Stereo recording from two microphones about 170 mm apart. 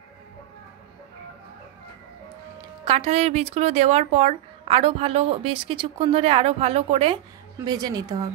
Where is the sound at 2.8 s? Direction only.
35° right (ahead or behind).